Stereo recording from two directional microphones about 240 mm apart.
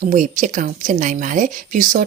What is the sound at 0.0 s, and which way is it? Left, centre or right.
Speech, right.